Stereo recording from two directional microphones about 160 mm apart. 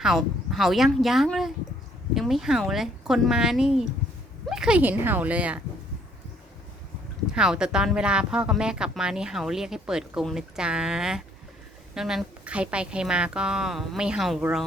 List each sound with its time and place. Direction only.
0.0 s a woman's voice: centre (ahead or behind)
7.3 s speech: 5° right (ahead or behind)